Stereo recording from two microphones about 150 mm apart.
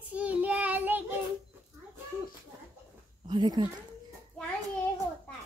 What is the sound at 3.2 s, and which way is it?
Speech, 30° right (ahead or behind).